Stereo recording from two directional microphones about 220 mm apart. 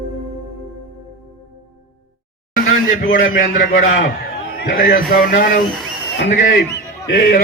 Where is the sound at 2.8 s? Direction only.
40° left (ahead or behind).